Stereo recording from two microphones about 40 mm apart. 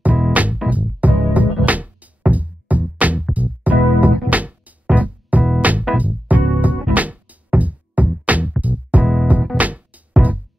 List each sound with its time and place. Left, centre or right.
0.3 s music: right